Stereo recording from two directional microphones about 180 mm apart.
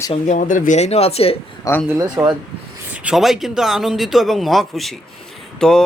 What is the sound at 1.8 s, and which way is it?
Speech, 15° right (ahead or behind).